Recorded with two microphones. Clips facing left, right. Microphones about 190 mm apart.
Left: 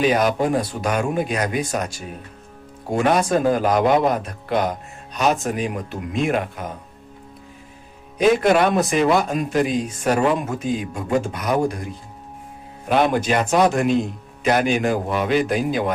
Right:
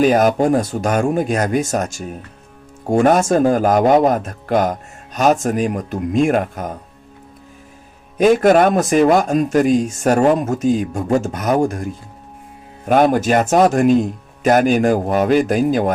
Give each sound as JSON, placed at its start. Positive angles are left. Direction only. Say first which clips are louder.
{"t": 0.0, "sound": "speech", "louder": "right 5 dB", "side_deg": -45}
{"t": 8.2, "sound": "speech", "louder": "right 4 dB", "side_deg": -45}
{"t": 12.9, "sound": "speech", "louder": "right 5 dB", "side_deg": -45}